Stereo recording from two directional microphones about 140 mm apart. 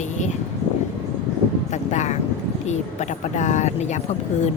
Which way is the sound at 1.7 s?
60° left (ahead or behind).